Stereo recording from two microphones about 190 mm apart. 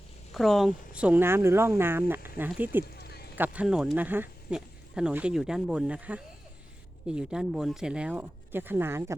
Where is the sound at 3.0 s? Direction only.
55° left (ahead or behind).